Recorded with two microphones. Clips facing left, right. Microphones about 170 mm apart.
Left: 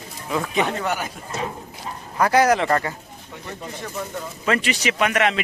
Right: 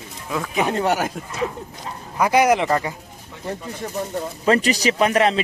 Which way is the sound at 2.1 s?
15° right (ahead or behind).